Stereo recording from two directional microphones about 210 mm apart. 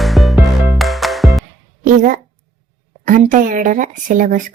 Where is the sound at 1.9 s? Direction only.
35° right (ahead or behind).